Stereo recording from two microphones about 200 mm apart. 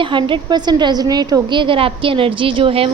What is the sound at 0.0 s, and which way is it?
A woman's voice, 25° right (ahead or behind).